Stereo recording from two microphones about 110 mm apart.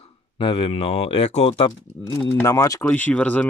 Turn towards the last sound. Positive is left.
turn(degrees=10)  # may be behind; listen again after turning